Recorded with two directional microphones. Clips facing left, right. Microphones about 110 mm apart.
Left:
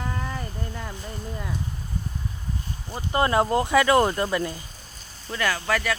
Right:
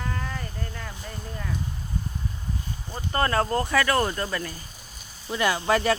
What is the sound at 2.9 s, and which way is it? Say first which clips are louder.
Speech: left 3 dB; 15° left (ahead or behind).